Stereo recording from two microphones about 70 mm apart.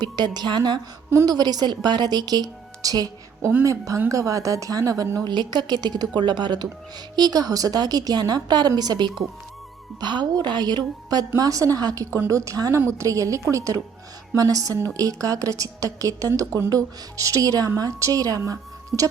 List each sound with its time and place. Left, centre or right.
0.0 s speech: right
1.2 s a woman's voice: right
3.6 s a woman's voice: right
5.2 s a woman's voice: right
11.3 s speech: right
12.7 s a woman's voice: right